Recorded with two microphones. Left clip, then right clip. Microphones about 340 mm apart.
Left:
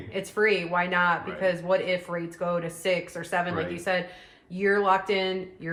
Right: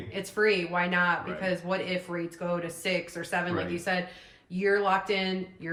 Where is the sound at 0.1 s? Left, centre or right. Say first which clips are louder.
Left 2 dB; left.